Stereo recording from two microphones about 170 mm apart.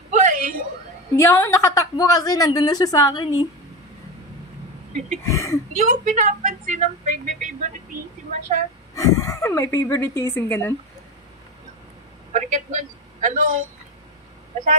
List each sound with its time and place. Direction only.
0.1 s a sound: 50° right (ahead or behind)
1.1 s a woman's voice: 15° left (ahead or behind)
5.2 s speech: 15° left (ahead or behind)
5.7 s speech: 50° right (ahead or behind)
8.9 s speech: 20° left (ahead or behind)
12.3 s a man's voice: 45° right (ahead or behind)